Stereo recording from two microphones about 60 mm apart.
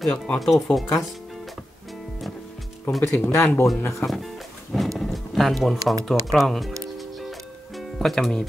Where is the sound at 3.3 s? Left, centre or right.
Left.